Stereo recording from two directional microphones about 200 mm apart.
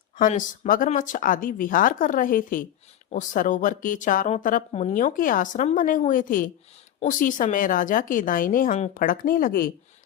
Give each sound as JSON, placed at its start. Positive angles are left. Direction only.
{"t": 0.2, "sound": "a woman's voice", "side_deg": 40}